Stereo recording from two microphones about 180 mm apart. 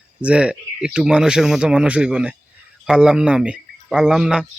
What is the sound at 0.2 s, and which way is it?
Speech, 5° right (ahead or behind).